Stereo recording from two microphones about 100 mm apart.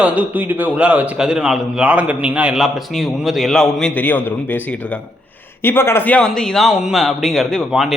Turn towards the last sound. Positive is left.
turn(degrees=0)  # may be behind; listen again after turning